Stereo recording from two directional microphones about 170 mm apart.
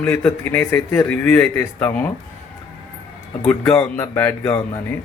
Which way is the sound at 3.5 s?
10° left (ahead or behind).